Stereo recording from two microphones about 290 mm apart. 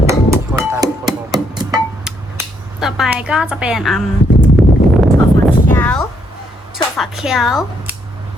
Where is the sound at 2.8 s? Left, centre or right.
Centre.